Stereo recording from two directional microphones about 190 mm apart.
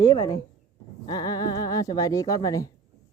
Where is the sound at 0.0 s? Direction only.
20° left (ahead or behind).